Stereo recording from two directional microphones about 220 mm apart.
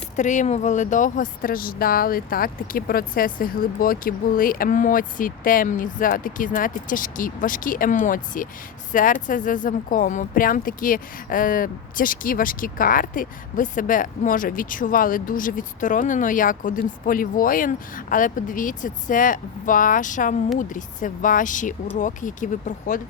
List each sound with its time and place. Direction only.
0.2 s speech: 35° left (ahead or behind)